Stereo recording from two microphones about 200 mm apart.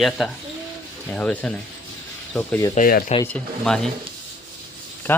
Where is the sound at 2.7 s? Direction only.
45° left (ahead or behind).